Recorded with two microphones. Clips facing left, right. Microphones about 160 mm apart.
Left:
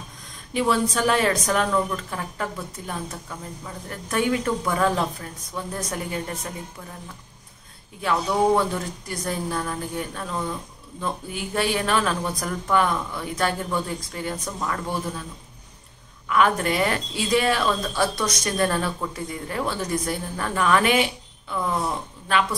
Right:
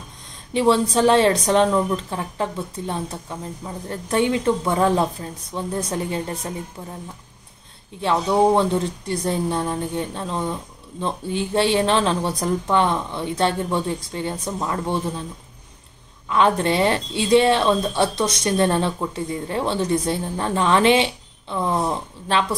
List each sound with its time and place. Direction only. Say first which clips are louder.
0.5 s speech: right 4 dB; 30° right (ahead or behind)
8.0 s speech: right 4 dB; 25° right (ahead or behind)
16.3 s speech: right 2 dB; 25° right (ahead or behind)